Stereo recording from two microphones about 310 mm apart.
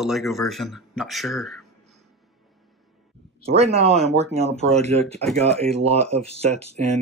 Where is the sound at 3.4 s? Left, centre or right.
Centre.